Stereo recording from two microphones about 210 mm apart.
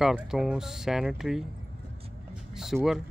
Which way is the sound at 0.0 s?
Centre (ahead or behind).